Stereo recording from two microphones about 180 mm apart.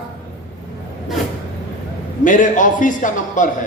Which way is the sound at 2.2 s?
45° left (ahead or behind).